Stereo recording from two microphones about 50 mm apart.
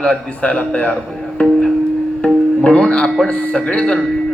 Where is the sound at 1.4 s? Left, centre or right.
Centre.